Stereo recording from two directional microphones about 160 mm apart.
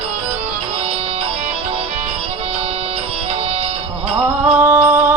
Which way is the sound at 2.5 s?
40° right (ahead or behind).